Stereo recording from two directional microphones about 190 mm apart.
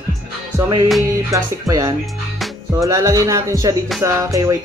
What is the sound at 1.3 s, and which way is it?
Speech, 15° right (ahead or behind).